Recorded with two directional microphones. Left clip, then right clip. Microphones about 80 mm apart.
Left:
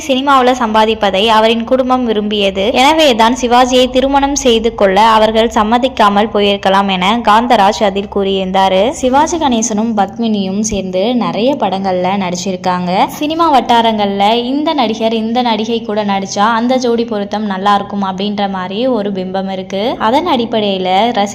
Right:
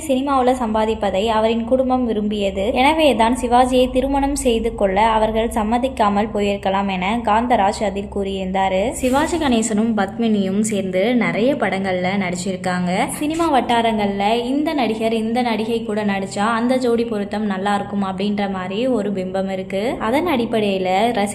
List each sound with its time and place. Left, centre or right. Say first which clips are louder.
0.1 s a woman's voice: left 7 dB; left
4.9 s a woman's voice: left 8 dB; left
9.2 s a woman's voice: left 6 dB; centre
10.9 s a woman's voice: left 4 dB; left
20.1 s a woman's voice: left 6 dB; left